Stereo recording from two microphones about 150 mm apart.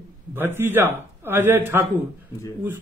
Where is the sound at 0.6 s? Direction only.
15° right (ahead or behind).